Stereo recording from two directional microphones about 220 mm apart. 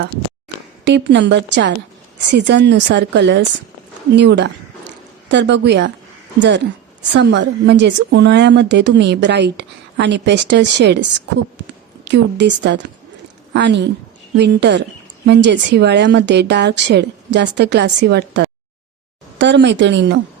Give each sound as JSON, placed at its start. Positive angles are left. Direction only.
{"t": 0.0, "sound": "a woman's voice", "side_deg": -50}
{"t": 12.0, "sound": "a woman's voice", "side_deg": -50}